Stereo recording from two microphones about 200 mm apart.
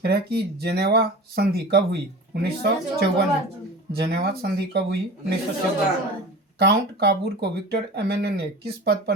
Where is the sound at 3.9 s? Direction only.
55° right (ahead or behind).